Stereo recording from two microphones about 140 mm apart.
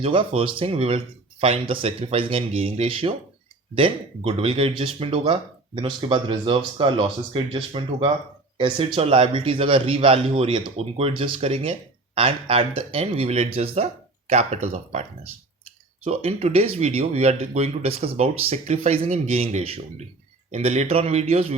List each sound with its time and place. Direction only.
0.0 s speech: 40° right (ahead or behind)
16.0 s speech: 45° right (ahead or behind)